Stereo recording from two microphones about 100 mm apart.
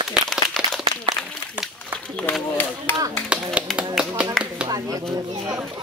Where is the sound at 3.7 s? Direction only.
Centre (ahead or behind).